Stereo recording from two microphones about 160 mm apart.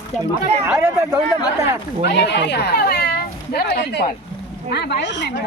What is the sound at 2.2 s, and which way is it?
Speech, 90° left.